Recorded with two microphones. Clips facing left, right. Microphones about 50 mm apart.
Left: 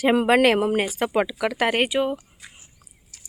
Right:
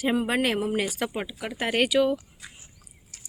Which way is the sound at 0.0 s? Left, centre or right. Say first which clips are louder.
Left 7 dB; left.